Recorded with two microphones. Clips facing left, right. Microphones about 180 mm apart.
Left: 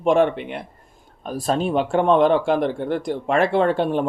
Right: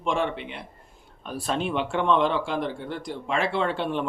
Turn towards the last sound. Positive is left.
turn(degrees=45)  # may be behind; listen again after turning